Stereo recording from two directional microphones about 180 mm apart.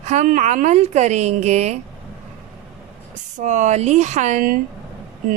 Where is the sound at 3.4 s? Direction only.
40° right (ahead or behind).